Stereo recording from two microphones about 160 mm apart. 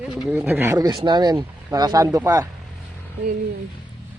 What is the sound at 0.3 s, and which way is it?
Speech, 15° right (ahead or behind).